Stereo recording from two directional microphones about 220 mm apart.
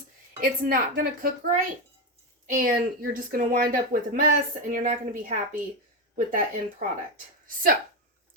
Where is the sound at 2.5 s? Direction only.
35° right (ahead or behind).